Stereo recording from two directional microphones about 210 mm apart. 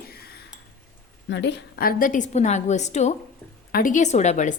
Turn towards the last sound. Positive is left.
turn(degrees=35)  # may be behind; listen again after turning